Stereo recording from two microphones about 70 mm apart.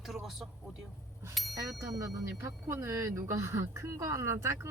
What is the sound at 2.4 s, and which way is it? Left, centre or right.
Speech, right.